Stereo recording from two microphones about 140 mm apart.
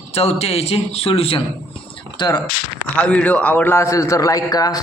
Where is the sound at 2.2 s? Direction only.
30° left (ahead or behind).